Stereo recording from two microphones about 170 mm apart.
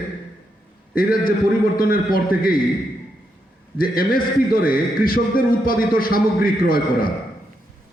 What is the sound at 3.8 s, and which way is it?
A man's voice, 60° left (ahead or behind).